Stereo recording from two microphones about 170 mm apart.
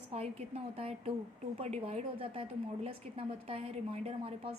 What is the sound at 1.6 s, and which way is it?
A woman's voice, 35° right (ahead or behind).